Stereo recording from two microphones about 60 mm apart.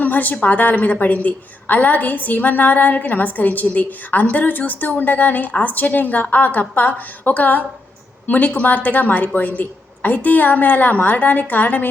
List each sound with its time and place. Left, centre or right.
0.0 s a woman's voice: left